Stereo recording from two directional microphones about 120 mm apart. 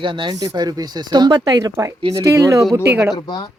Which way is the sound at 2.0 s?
45° right (ahead or behind).